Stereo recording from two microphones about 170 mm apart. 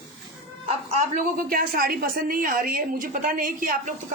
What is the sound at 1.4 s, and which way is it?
A woman's voice, 60° right (ahead or behind).